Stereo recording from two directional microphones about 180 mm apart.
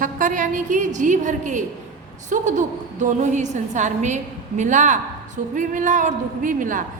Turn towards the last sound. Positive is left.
turn(degrees=-45)  # may be behind; listen again after turning